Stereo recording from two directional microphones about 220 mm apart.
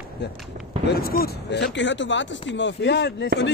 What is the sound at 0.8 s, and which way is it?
Speech, 45° left (ahead or behind).